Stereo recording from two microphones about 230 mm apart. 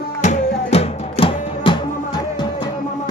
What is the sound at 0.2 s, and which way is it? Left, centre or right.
Music, left.